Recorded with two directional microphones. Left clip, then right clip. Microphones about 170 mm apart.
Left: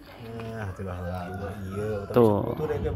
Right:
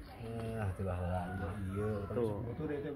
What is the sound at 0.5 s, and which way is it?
Speech, 25° right (ahead or behind).